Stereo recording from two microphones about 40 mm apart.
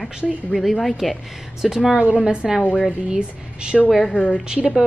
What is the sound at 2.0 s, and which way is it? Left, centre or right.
Speech, right.